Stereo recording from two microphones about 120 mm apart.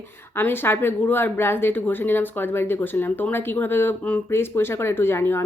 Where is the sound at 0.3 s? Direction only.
20° left (ahead or behind).